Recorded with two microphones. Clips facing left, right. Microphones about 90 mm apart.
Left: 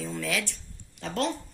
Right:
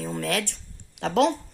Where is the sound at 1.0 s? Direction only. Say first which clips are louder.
Right 9 dB; 85° right.